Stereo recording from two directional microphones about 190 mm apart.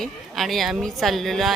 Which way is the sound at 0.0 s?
Centre (ahead or behind).